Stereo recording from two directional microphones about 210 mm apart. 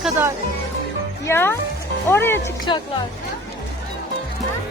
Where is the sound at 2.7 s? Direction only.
20° left (ahead or behind).